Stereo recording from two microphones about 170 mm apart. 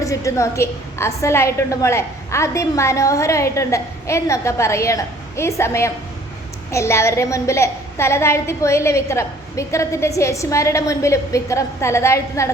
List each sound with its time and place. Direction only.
0.0 s a woman's voice: 20° left (ahead or behind)